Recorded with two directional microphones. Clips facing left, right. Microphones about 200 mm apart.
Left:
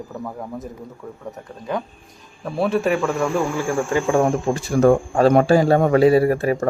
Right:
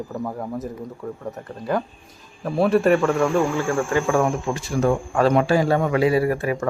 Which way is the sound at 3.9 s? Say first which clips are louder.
Left 3 dB; 30° left (ahead or behind).